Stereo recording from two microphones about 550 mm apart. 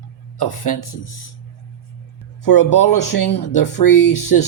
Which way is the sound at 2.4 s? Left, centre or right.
Left.